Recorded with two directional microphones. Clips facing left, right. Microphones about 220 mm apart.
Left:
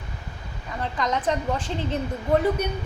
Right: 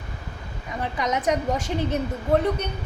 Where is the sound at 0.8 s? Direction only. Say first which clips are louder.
Right 1 dB; 10° right (ahead or behind).